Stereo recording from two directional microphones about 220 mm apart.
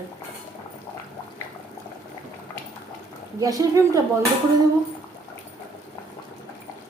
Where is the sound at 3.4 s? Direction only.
15° right (ahead or behind).